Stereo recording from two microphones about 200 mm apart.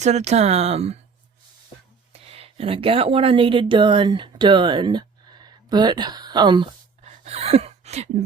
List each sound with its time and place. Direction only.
0.0 s speech: 35° right (ahead or behind)
2.1 s speech: 30° right (ahead or behind)